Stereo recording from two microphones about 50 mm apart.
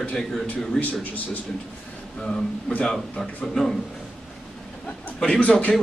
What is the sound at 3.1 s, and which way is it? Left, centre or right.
Speech, centre.